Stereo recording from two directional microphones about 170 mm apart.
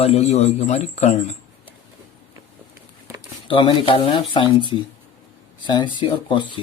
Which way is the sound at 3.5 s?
30° left (ahead or behind).